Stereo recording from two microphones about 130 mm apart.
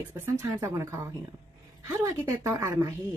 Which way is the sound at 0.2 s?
20° right (ahead or behind).